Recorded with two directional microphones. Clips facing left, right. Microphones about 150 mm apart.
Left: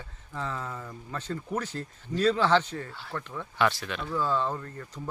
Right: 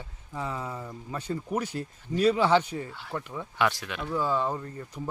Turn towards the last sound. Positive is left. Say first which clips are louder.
# right 2 dB
turn(degrees=-15)  # may be behind; listen again after turning